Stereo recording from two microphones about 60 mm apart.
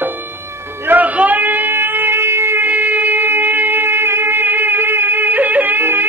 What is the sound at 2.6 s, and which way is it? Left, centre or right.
Shofar, right.